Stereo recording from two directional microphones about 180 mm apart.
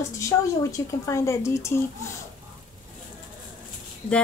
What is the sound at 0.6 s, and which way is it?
Speech, 15° left (ahead or behind).